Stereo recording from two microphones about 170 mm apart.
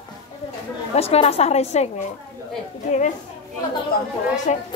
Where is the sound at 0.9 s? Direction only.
35° left (ahead or behind).